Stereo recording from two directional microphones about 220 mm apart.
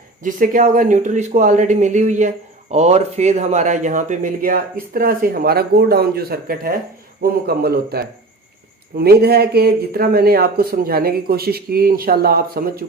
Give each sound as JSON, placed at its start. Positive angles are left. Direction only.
{"t": 0.2, "sound": "speech", "side_deg": -35}